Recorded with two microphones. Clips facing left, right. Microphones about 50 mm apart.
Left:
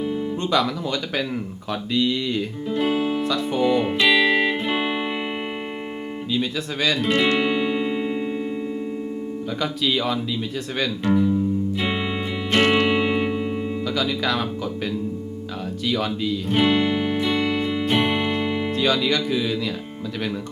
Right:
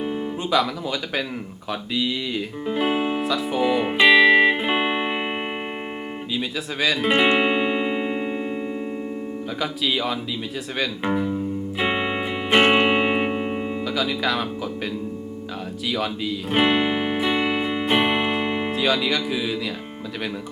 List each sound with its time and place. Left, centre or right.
0.0 s guitar: right
0.5 s speech: centre
3.8 s music: centre
6.3 s speech: centre
7.1 s music: right
9.6 s speech: centre
11.0 s speech: centre
11.9 s music: right
13.8 s speech: centre
15.9 s speech: centre
16.5 s music: centre
18.7 s speech: centre